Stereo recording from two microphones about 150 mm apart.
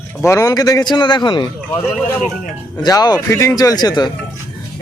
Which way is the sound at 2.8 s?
25° left (ahead or behind).